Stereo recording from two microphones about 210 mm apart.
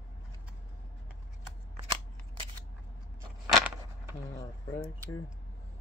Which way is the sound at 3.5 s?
5° right (ahead or behind).